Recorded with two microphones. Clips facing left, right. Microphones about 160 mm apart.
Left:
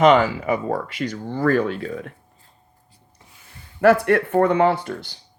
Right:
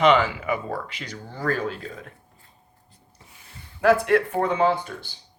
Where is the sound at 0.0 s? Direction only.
40° left (ahead or behind); by 2.0 s 60° left (ahead or behind).